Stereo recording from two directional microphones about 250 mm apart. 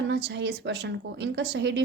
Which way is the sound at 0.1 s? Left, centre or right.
Right.